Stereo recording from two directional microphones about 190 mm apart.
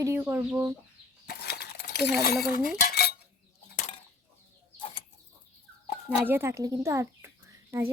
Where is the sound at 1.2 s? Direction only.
55° left (ahead or behind).